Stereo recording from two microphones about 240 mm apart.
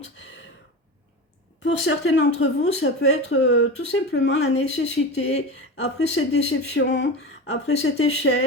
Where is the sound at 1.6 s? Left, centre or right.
Left.